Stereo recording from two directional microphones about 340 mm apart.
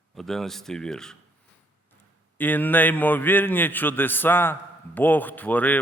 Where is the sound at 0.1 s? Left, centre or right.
Centre.